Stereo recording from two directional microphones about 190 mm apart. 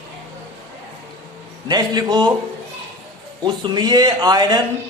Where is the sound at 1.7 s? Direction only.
20° right (ahead or behind).